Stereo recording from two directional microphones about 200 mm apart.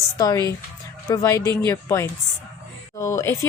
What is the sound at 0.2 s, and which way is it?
A woman's voice, 15° left (ahead or behind).